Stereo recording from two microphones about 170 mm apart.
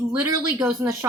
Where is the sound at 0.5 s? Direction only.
15° right (ahead or behind).